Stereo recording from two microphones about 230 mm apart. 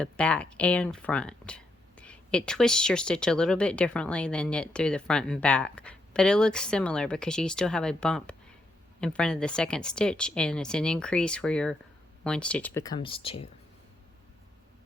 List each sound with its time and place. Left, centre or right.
0.0 s speech: centre; by 13.5 s left